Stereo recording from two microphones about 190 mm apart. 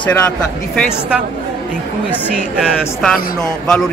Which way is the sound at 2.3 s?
Centre (ahead or behind).